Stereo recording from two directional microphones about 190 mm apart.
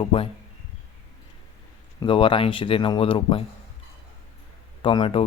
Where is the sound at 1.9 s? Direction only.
25° left (ahead or behind).